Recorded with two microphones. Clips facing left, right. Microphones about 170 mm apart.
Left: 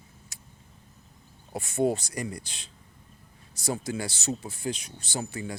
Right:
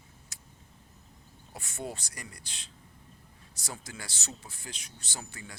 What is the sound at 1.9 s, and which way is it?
Speech, 20° left (ahead or behind).